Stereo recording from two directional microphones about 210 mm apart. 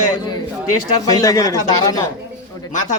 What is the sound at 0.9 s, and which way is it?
Speech, 15° left (ahead or behind).